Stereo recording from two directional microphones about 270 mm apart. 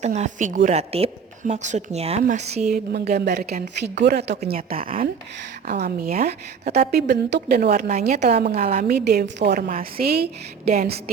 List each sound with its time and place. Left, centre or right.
0.0 s a woman's voice: right
4.4 s a woman's voice: right